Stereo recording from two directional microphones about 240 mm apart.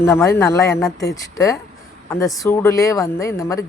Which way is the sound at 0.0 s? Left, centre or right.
Centre.